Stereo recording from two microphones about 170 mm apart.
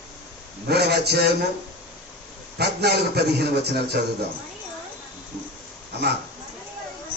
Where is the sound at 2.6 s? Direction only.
70° right (ahead or behind).